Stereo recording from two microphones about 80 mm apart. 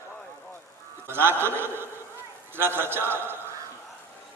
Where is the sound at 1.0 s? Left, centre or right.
Right.